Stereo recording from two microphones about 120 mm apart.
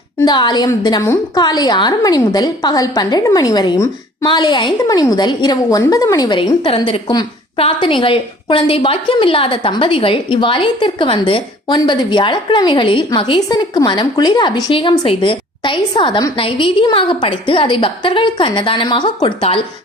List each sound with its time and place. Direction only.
0.3 s a woman's voice: 40° left (ahead or behind)
6.7 s a woman's voice: 50° left (ahead or behind)
7.1 s a sound: 35° left (ahead or behind)
7.6 s a woman's voice: 45° left (ahead or behind)
19.4 s a woman's voice: 55° left (ahead or behind)